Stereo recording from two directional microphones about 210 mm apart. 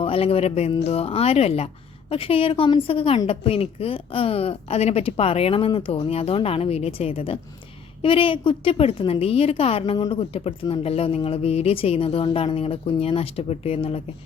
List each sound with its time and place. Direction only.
0.0 s a woman's voice: 25° left (ahead or behind)